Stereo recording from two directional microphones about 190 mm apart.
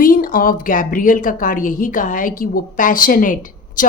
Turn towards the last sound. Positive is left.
turn(degrees=45)  # may be behind; listen again after turning